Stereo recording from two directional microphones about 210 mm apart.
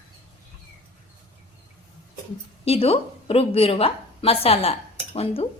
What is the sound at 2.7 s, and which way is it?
A woman's voice, 30° left (ahead or behind).